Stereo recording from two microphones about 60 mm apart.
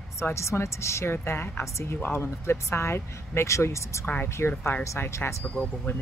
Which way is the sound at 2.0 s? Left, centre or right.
Left.